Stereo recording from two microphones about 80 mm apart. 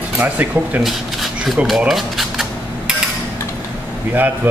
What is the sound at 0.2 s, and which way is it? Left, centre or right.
Speech, centre.